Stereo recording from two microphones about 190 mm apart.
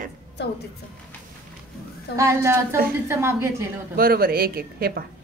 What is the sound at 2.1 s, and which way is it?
A woman's voice, 15° right (ahead or behind).